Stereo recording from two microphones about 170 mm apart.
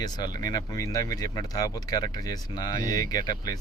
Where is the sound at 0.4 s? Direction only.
20° left (ahead or behind).